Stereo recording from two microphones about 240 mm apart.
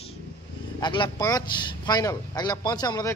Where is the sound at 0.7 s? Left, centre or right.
Centre.